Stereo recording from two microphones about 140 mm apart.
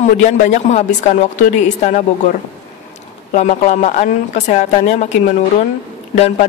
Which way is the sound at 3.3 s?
60° left (ahead or behind).